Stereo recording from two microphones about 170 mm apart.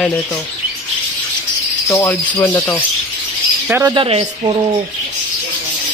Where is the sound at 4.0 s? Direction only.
35° right (ahead or behind).